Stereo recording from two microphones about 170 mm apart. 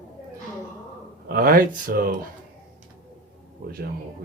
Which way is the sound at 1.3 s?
60° right (ahead or behind).